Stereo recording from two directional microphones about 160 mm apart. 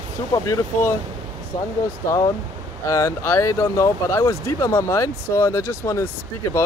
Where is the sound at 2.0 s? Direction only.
20° left (ahead or behind).